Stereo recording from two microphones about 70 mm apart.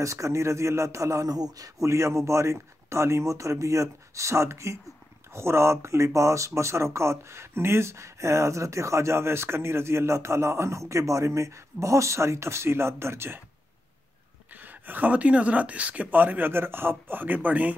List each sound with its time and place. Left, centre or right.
0.0 s speech: right
1.9 s speech: right
14.5 s speech: right